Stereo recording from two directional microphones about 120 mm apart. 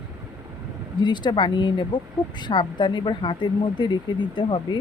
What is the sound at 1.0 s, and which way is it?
Speech, 40° left (ahead or behind).